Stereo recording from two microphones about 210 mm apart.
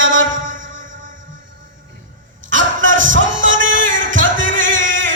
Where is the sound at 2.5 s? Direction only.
65° right (ahead or behind).